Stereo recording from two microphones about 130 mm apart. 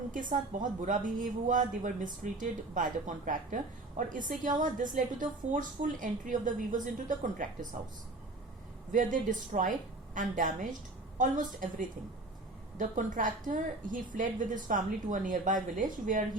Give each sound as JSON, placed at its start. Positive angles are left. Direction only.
{"t": 0.1, "sound": "a woman's voice", "side_deg": -90}
{"t": 8.9, "sound": "a woman's voice", "side_deg": -90}